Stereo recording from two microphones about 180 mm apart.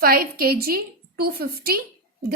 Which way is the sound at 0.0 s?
55° right (ahead or behind).